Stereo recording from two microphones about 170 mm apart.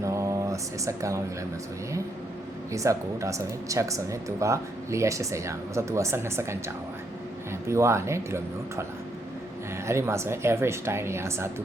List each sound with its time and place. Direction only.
0.0 s a sound: 15° right (ahead or behind)
2.7 s speech: 20° right (ahead or behind)
7.7 s speech: 15° right (ahead or behind)
9.8 s speech: 15° right (ahead or behind)